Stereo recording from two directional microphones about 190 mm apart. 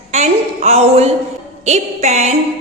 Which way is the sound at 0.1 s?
35° right (ahead or behind).